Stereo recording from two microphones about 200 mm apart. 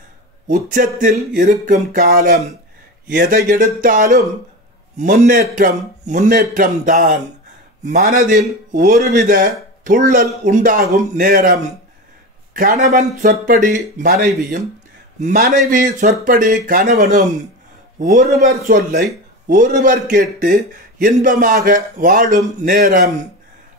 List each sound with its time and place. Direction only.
0.5 s a man's voice: 40° right (ahead or behind)